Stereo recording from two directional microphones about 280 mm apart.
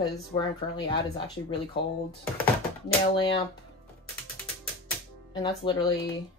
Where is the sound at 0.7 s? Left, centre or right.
Centre.